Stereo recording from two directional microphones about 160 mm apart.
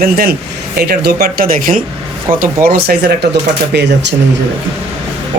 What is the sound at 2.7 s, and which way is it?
Speech, 75° right (ahead or behind).